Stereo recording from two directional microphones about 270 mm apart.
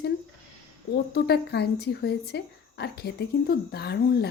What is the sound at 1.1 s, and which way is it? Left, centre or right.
Speech, left.